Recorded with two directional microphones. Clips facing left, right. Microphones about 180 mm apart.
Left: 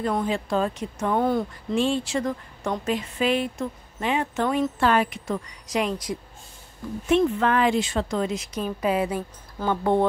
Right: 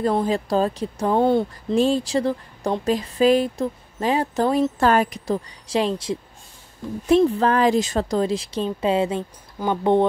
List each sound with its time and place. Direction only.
0.0 s speech: 35° right (ahead or behind)
1.8 s speech: 40° right (ahead or behind); by 10.0 s 20° right (ahead or behind)